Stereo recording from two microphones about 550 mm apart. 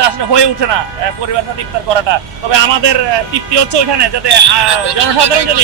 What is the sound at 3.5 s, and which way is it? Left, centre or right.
Speech, right.